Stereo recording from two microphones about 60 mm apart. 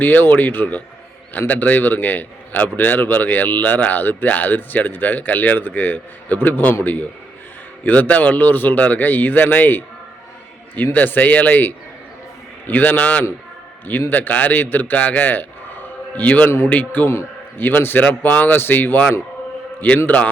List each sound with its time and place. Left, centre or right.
0.0 s a man's voice: left
10.9 s a man's voice: left